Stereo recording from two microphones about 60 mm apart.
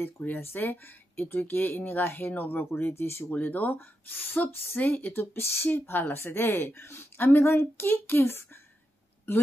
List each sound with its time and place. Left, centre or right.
0.4 s speech: left
3.3 s speech: left